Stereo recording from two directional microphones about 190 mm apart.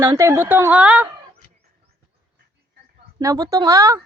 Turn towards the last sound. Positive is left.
turn(degrees=-15)  # may be behind; listen again after turning